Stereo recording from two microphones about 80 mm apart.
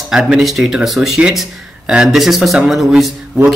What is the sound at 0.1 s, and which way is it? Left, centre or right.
A man's voice, centre.